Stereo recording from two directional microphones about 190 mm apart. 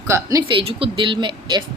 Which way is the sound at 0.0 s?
15° right (ahead or behind).